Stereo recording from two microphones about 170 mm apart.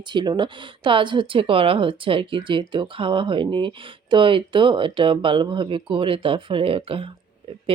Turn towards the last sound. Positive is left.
turn(degrees=-35)  # may be behind; listen again after turning